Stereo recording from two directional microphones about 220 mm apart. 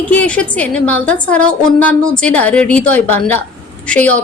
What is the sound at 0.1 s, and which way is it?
A woman's voice, 5° left (ahead or behind).